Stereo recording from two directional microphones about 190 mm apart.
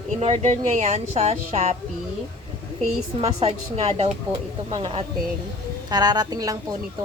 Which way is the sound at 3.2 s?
35° right (ahead or behind).